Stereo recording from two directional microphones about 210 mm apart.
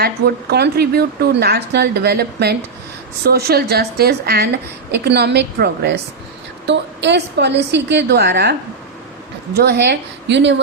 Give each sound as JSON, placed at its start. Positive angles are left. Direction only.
{"t": 0.0, "sound": "a woman's voice", "side_deg": -50}
{"t": 9.6, "sound": "a woman's voice", "side_deg": -50}